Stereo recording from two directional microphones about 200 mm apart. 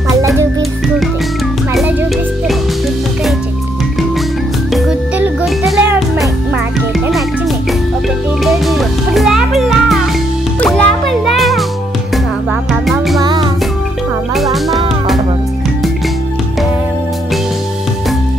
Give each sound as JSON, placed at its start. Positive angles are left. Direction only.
{"t": 4.7, "sound": "music", "side_deg": 0}
{"t": 8.5, "sound": "music", "side_deg": 0}
{"t": 13.2, "sound": "music", "side_deg": -20}
{"t": 14.3, "sound": "music", "side_deg": 0}